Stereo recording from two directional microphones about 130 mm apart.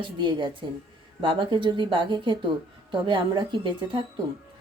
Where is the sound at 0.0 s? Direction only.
40° right (ahead or behind).